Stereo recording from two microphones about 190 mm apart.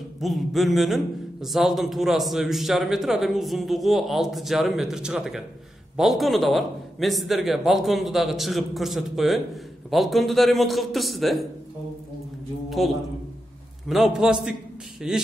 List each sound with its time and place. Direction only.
0.2 s a man's voice: centre (ahead or behind)
12.6 s a sound: centre (ahead or behind)
13.8 s a man's voice: centre (ahead or behind)